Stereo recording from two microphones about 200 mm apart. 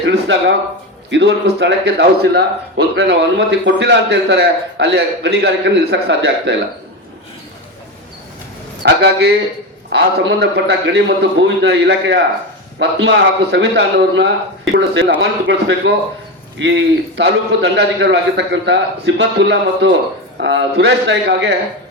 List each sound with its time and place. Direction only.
0.0 s a sound: 65° right (ahead or behind)
1.1 s speech: 60° right (ahead or behind)
8.8 s a man's voice: 55° right (ahead or behind)